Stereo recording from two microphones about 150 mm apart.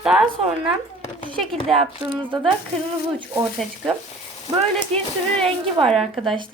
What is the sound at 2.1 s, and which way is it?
Speech, 30° right (ahead or behind).